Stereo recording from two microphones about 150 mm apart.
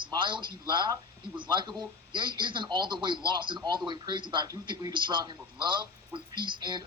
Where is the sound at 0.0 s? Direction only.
30° right (ahead or behind).